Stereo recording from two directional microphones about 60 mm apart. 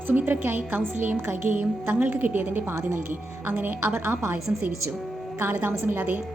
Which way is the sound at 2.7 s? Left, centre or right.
Right.